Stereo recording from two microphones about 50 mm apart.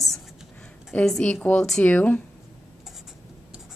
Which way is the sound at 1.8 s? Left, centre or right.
Left.